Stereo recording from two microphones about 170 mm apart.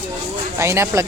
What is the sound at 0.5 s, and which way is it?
Speech, 15° right (ahead or behind).